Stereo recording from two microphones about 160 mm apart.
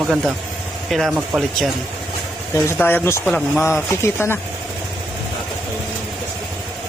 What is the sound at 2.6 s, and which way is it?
Speech, 10° left (ahead or behind).